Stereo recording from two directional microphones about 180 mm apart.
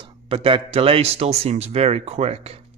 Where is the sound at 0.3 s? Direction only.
30° right (ahead or behind).